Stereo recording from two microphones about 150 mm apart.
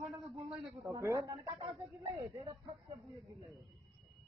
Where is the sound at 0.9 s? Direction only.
20° right (ahead or behind).